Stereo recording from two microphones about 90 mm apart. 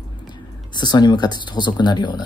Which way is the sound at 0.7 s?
55° left (ahead or behind).